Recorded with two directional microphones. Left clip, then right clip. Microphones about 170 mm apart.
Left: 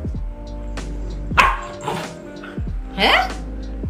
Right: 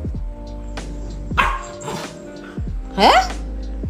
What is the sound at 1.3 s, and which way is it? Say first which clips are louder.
Music: left 3 dB; 10° right (ahead or behind).